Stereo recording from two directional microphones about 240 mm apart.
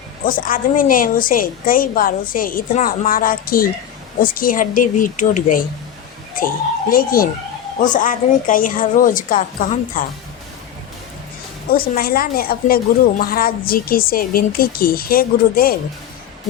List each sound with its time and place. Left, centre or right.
0.3 s a woman's voice: left
6.9 s a woman's voice: left
11.7 s a woman's voice: left